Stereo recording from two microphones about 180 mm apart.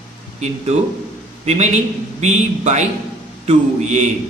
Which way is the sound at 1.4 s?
40° right (ahead or behind).